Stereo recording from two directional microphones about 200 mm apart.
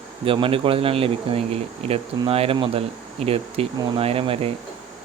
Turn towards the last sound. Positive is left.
turn(degrees=-30)  # may be behind; listen again after turning